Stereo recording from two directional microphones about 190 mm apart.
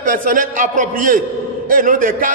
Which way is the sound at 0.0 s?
45° right (ahead or behind).